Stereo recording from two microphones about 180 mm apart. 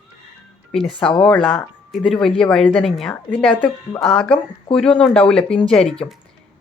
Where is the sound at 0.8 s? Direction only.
30° left (ahead or behind).